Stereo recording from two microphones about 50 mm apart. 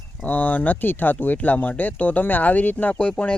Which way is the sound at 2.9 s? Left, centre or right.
Left.